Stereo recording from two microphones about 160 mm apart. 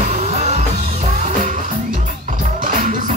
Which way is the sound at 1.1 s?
50° right (ahead or behind).